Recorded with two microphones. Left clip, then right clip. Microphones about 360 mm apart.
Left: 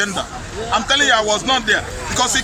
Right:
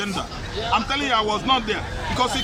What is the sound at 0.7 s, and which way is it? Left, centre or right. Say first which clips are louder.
Speech: left 7 dB; centre.